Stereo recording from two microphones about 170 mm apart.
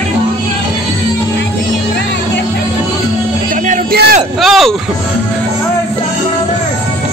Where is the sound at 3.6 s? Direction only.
45° right (ahead or behind).